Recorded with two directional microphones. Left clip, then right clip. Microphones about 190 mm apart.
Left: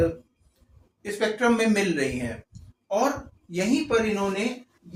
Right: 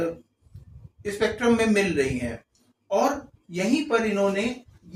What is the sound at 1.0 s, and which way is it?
Speech, 10° right (ahead or behind).